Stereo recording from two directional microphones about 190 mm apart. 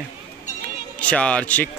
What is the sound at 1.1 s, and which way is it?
Speech, 5° left (ahead or behind).